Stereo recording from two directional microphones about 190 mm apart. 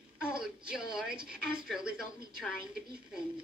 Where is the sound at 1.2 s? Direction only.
5° right (ahead or behind).